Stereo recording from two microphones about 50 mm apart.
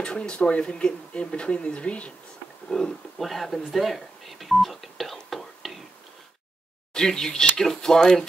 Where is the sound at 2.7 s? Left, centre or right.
Centre.